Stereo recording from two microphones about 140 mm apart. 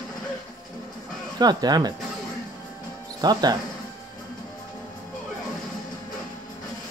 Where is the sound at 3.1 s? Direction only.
30° right (ahead or behind).